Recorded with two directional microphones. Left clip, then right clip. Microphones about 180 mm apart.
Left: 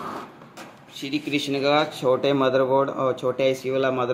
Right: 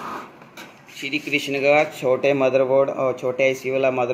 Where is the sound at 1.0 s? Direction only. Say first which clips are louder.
Right 3 dB; 25° left (ahead or behind).